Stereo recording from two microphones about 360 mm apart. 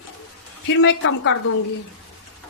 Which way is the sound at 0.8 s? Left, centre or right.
Left.